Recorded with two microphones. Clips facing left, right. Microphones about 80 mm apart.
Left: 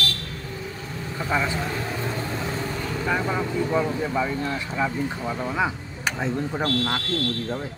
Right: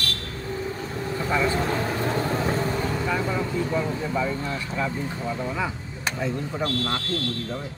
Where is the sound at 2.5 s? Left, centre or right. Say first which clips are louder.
Right 4 dB; right.